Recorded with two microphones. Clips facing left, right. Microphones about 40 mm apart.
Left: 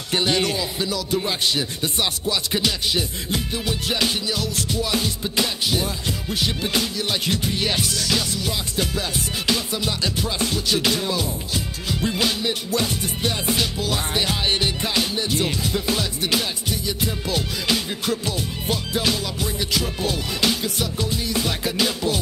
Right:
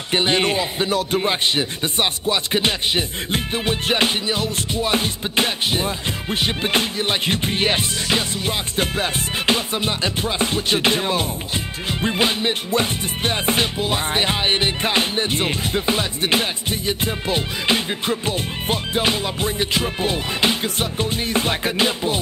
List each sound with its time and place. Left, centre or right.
0.1 s speech: right